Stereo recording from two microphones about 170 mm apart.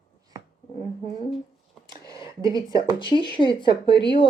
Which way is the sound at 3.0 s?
30° left (ahead or behind).